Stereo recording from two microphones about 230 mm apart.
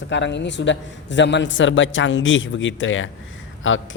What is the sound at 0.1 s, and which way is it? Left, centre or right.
A man's voice, left.